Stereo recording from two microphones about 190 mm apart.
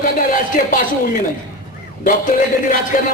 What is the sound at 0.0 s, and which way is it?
A woman's voice, 45° left (ahead or behind).